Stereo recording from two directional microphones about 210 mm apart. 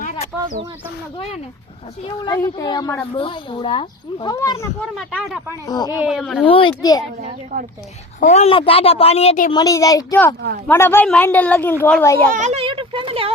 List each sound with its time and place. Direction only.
0.0 s a sound: 35° left (ahead or behind)
2.0 s a woman's voice: 20° left (ahead or behind)
4.9 s speech: centre (ahead or behind)
5.6 s a woman's voice: 20° left (ahead or behind)
5.9 s speech: 5° right (ahead or behind)
6.5 s a woman's voice: 25° left (ahead or behind)
7.2 s a woman's voice: 35° right (ahead or behind)
8.2 s a woman's voice: 35° left (ahead or behind)
9.5 s speech: 20° left (ahead or behind)
12.3 s speech: 35° right (ahead or behind)